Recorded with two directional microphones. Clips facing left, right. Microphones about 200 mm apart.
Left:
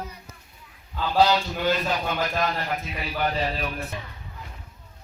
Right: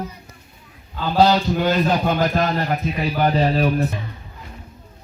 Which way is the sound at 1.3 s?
40° right (ahead or behind).